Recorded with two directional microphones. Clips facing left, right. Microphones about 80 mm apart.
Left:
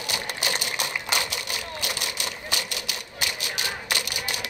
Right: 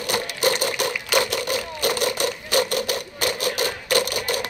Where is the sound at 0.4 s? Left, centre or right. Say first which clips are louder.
Right 9 dB; right.